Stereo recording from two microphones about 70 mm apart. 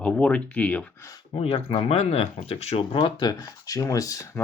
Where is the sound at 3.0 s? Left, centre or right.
Left.